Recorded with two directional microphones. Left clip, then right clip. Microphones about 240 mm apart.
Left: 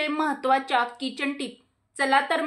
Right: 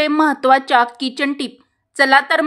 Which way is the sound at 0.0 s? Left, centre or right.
Right.